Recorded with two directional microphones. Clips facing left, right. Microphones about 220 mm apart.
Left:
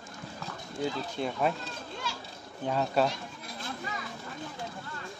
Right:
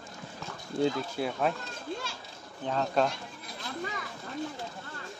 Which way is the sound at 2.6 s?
10° left (ahead or behind).